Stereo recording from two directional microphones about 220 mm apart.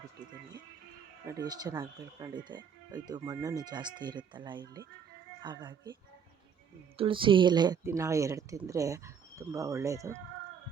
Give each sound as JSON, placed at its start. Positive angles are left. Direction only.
{"t": 1.2, "sound": "speech", "side_deg": -15}